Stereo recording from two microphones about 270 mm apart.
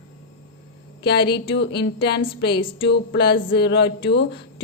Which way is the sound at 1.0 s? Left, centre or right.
Left.